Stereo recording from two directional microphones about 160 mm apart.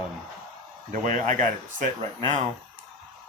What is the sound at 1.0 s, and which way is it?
Speech, 50° right (ahead or behind).